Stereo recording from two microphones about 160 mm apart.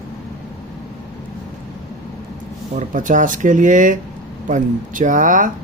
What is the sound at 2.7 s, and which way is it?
Speech, 55° right (ahead or behind).